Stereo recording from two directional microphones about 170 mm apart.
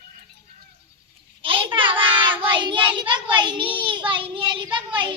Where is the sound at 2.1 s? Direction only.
30° right (ahead or behind).